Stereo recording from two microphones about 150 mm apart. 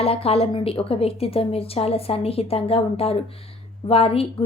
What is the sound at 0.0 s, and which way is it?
A woman's voice, 40° left (ahead or behind).